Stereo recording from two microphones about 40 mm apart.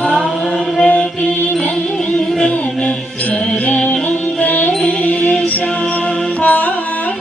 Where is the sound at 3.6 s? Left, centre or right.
Left.